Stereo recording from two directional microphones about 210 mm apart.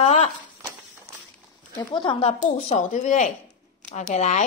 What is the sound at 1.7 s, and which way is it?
Speech, 25° left (ahead or behind).